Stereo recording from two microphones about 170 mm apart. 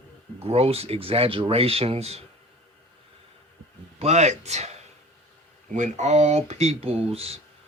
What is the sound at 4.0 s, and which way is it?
Speech, 40° right (ahead or behind).